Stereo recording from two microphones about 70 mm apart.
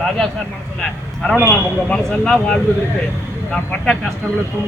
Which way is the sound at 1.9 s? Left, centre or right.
Centre.